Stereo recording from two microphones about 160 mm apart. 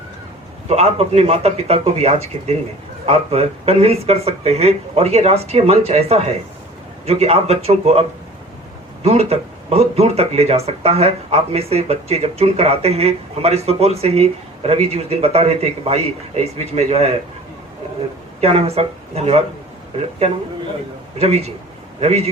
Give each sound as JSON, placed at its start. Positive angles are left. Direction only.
{"t": 0.7, "sound": "speech", "side_deg": -40}
{"t": 9.0, "sound": "speech", "side_deg": -40}
{"t": 18.3, "sound": "speech", "side_deg": -40}
{"t": 21.2, "sound": "speech", "side_deg": -40}